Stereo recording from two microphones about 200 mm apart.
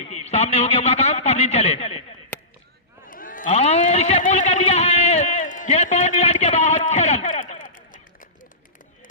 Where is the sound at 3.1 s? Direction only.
45° left (ahead or behind).